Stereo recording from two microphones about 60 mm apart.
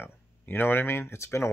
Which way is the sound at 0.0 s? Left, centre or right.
Left.